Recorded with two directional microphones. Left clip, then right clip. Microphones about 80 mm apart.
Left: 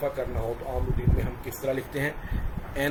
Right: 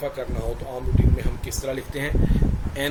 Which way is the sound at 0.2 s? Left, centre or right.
Centre.